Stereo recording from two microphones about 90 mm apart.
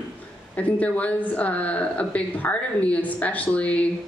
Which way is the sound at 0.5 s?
15° left (ahead or behind).